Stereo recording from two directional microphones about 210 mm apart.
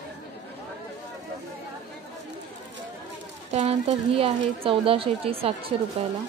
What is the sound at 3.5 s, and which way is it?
A woman's voice, 30° right (ahead or behind).